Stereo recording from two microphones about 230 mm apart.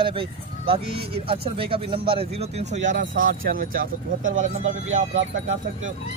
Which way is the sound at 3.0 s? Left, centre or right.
Right.